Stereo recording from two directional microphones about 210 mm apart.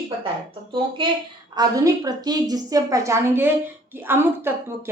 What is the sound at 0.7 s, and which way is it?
Speech, 25° right (ahead or behind).